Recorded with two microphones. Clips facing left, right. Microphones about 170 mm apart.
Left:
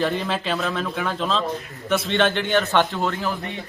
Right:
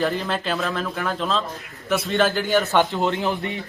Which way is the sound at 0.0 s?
Centre (ahead or behind).